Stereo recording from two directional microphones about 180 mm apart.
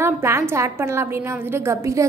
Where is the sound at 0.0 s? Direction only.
15° right (ahead or behind).